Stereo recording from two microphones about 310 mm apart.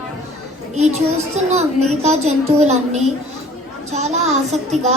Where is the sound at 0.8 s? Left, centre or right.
Right.